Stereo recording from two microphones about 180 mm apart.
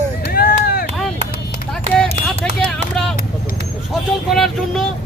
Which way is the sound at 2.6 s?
Centre (ahead or behind).